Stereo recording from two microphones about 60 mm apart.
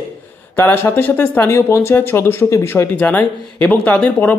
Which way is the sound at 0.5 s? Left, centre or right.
Left.